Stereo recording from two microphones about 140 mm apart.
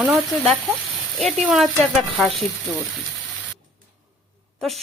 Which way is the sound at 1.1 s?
Centre (ahead or behind).